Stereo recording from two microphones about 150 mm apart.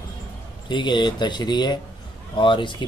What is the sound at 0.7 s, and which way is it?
Speech, 30° left (ahead or behind).